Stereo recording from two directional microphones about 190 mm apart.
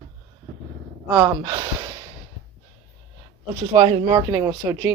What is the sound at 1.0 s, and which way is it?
Speech, 10° right (ahead or behind).